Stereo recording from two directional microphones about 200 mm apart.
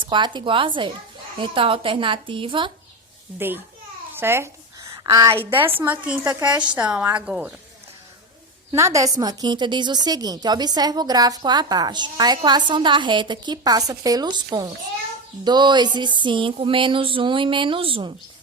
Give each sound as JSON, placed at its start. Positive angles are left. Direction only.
{"t": 0.0, "sound": "a woman's voice", "side_deg": -25}
{"t": 3.3, "sound": "a woman's voice", "side_deg": -10}
{"t": 4.1, "sound": "a sound", "side_deg": -10}
{"t": 5.0, "sound": "a woman's voice", "side_deg": -25}
{"t": 5.5, "sound": "a woman's voice", "side_deg": -10}
{"t": 8.7, "sound": "a woman's voice", "side_deg": -15}